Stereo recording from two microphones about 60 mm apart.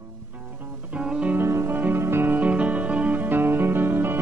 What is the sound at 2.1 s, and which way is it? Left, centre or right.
Music, right.